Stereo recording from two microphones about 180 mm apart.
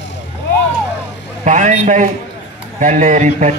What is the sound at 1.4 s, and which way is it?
A man's voice, 40° right (ahead or behind).